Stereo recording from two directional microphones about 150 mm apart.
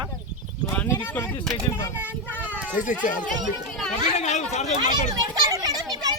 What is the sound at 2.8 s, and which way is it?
Speech, 60° left (ahead or behind).